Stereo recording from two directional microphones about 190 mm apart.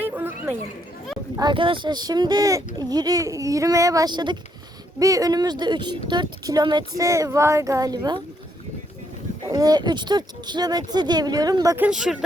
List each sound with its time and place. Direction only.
0.0 s a sound: 10° right (ahead or behind)
1.4 s speech: 25° right (ahead or behind)
9.5 s speech: 20° right (ahead or behind)
11.9 s speech: 5° right (ahead or behind)